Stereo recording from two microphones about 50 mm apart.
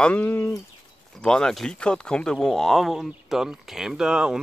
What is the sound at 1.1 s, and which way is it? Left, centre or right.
Speech, centre.